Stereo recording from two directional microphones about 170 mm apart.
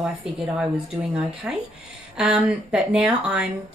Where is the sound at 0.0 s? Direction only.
5° right (ahead or behind).